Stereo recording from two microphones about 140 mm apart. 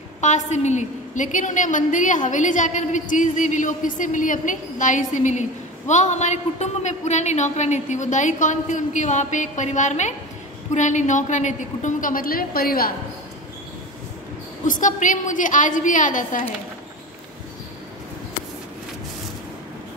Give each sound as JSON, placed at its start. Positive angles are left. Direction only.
{"t": 0.2, "sound": "a woman's voice", "side_deg": 55}
{"t": 14.7, "sound": "a woman's voice", "side_deg": 65}